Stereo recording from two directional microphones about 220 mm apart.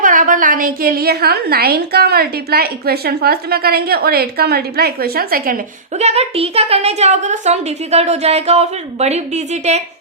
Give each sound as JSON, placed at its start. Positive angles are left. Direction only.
{"t": 0.0, "sound": "a woman's voice", "side_deg": -35}
{"t": 6.0, "sound": "a woman's voice", "side_deg": -30}